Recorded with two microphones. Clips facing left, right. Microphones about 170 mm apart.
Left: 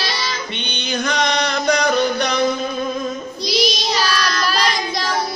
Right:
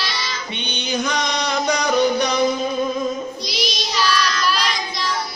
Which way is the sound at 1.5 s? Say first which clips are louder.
Right 1 dB; 10° right (ahead or behind).